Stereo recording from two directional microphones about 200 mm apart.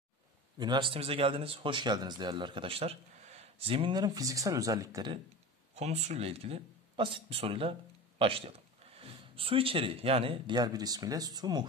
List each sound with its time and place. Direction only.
0.6 s a man's voice: 20° right (ahead or behind)
5.8 s a man's voice: 35° right (ahead or behind)